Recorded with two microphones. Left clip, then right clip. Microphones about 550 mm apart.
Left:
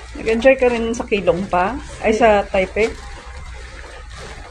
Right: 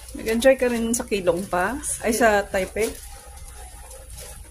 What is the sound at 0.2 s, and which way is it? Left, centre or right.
Speech, right.